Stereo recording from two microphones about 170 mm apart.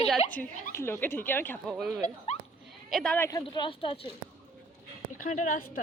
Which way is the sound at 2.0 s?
40° left (ahead or behind).